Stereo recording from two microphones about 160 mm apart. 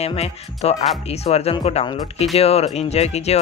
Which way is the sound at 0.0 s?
40° left (ahead or behind).